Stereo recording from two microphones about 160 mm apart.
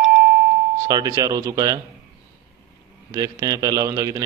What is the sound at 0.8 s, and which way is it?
A man's voice, 20° right (ahead or behind).